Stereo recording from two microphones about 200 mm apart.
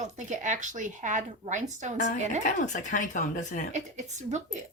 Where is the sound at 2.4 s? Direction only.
40° left (ahead or behind).